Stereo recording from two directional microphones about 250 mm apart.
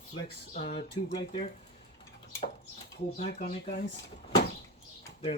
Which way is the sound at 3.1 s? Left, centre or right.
Left.